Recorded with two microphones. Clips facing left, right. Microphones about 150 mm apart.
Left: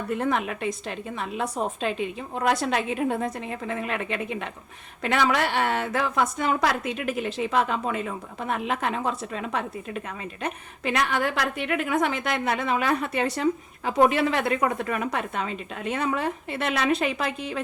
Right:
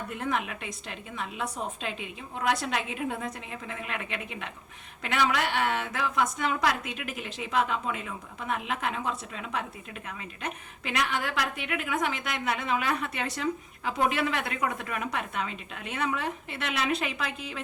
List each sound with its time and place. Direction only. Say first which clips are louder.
0.2 s a woman's voice: left 2 dB; 40° left (ahead or behind)